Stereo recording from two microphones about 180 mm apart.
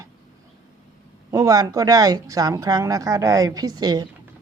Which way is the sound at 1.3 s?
20° right (ahead or behind).